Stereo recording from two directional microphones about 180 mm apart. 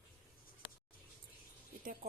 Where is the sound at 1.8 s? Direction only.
50° right (ahead or behind).